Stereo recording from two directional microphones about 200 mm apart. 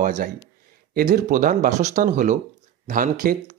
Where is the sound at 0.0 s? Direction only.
40° right (ahead or behind).